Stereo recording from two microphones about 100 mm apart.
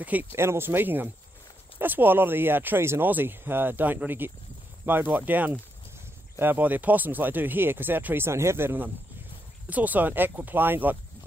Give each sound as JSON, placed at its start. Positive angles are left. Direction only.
{"t": 0.0, "sound": "speech", "side_deg": -15}